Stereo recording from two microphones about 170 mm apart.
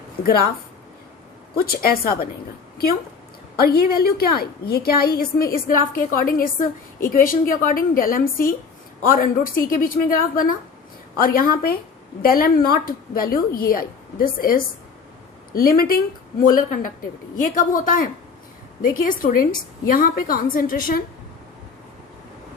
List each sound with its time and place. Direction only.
1.5 s a woman's voice: 65° left (ahead or behind)
3.6 s a woman's voice: 65° left (ahead or behind)
19.0 s a woman's voice: 55° left (ahead or behind)